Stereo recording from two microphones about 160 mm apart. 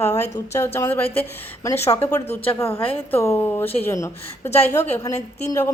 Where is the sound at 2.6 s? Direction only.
15° left (ahead or behind).